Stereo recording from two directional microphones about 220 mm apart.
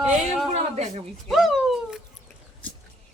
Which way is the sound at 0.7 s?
30° right (ahead or behind).